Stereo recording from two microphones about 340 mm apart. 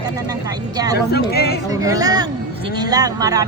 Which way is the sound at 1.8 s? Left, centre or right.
Centre.